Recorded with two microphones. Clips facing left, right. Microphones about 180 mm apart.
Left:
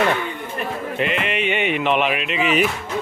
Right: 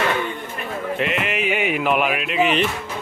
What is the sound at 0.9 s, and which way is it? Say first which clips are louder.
Speech: left 2 dB; centre (ahead or behind).